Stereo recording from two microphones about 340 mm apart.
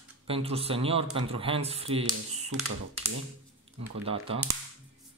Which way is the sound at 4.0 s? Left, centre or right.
Centre.